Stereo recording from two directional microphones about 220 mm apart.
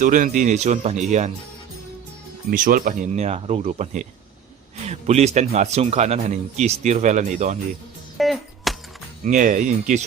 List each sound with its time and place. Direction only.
0.0 s speech: 35° right (ahead or behind)
2.5 s speech: 40° right (ahead or behind)
8.2 s music: centre (ahead or behind)
9.2 s speech: 35° right (ahead or behind)